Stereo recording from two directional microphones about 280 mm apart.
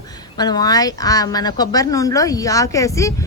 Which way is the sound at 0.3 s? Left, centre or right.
Centre.